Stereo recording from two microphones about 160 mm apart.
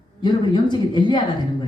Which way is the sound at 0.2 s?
30° left (ahead or behind).